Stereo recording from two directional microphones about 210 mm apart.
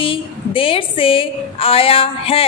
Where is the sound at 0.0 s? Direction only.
25° left (ahead or behind).